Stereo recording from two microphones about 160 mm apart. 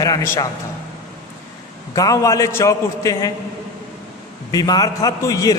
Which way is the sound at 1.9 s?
20° left (ahead or behind).